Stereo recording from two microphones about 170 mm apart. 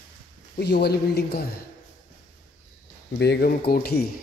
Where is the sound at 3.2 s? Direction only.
75° left (ahead or behind).